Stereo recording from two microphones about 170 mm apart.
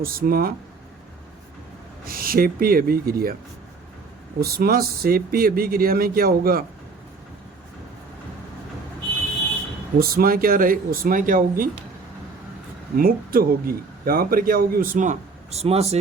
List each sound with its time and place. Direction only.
0.0 s a man's voice: 60° right (ahead or behind)
2.0 s a man's voice: 60° right (ahead or behind)
4.4 s a man's voice: 65° right (ahead or behind)
10.0 s a man's voice: 60° right (ahead or behind)
13.0 s a man's voice: 60° right (ahead or behind); by 16.0 s 35° right (ahead or behind)